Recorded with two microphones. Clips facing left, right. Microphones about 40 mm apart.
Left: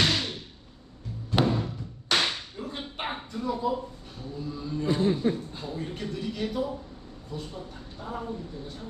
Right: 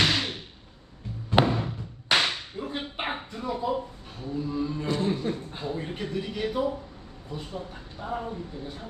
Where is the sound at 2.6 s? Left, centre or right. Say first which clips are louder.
Right 3 dB; centre.